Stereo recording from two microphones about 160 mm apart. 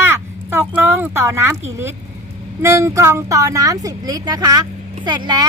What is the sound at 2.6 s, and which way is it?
Speech, 20° right (ahead or behind).